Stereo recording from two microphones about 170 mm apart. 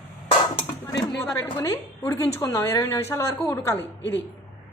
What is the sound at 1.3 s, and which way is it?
A woman's voice, 20° left (ahead or behind).